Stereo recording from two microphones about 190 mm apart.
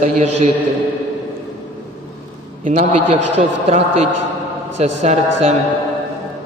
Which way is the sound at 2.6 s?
35° right (ahead or behind).